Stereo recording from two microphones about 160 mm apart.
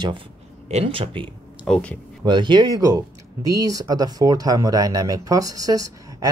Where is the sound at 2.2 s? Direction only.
30° right (ahead or behind).